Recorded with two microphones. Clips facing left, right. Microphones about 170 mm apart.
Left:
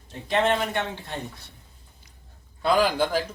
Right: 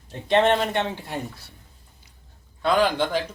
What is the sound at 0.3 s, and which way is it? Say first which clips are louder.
Speech: right 4 dB; 30° right (ahead or behind).